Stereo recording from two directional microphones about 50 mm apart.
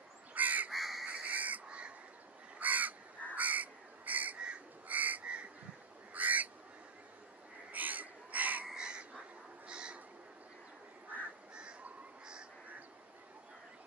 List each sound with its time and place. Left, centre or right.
0.3 s crow: right
0.7 s crow: centre
1.0 s owl: right
2.6 s crow: right
6.1 s bird: right
7.7 s a sound: right
8.6 s a sound: centre
9.7 s crow: centre